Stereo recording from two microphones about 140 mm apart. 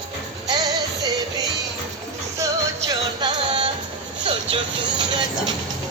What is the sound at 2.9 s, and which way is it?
Music, 30° right (ahead or behind).